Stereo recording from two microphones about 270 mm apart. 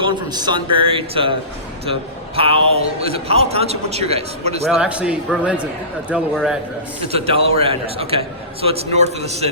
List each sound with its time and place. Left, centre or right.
0.0 s a man's voice: centre
4.7 s a man's voice: centre
7.1 s a man's voice: right